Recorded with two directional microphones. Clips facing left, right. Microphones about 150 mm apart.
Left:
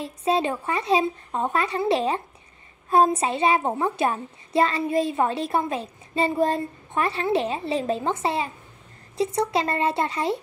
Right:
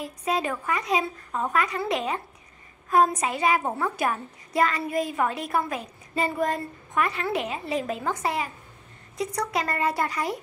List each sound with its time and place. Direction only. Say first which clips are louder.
0.0 s a child's voice: left 4 dB; 30° left (ahead or behind)